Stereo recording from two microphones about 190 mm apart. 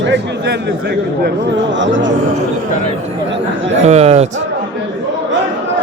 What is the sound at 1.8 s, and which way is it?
Speech, 75° right (ahead or behind).